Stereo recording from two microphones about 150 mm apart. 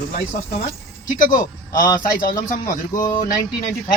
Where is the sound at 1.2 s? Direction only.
60° left (ahead or behind).